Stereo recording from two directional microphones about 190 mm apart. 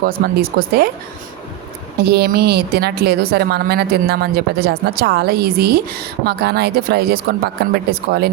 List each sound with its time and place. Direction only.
0.0 s speech: 50° right (ahead or behind)
2.0 s a woman's voice: 60° right (ahead or behind)